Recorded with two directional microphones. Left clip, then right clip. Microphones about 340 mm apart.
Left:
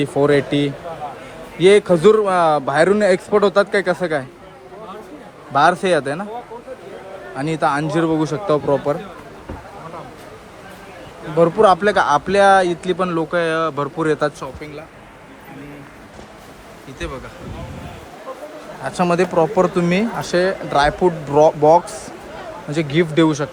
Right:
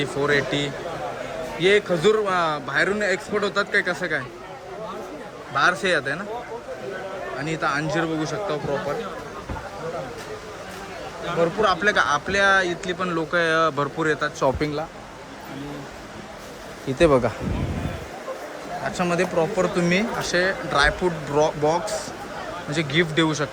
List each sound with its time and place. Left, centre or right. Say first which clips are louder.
0.0 s speech: left 6 dB; centre
5.5 s speech: left 6 dB; centre
7.3 s speech: left 7 dB; centre
11.6 s speech: left 6 dB; centre
14.6 s speech: right 7 dB; centre
18.8 s speech: left 6 dB; centre